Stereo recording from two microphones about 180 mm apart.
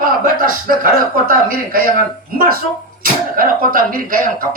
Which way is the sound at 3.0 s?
50° right (ahead or behind).